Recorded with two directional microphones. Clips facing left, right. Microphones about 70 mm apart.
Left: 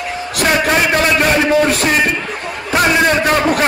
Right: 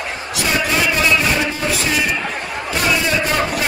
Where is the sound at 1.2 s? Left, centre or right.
Left.